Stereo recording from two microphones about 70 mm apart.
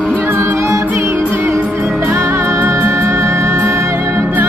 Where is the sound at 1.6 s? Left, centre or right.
Right.